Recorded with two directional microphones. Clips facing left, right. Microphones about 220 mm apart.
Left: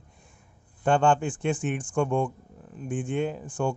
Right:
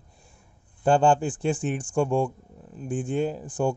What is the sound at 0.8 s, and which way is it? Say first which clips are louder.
Speech: right 2 dB; 35° right (ahead or behind).